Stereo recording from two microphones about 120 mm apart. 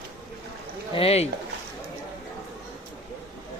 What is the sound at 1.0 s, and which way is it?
Speech, 60° left (ahead or behind).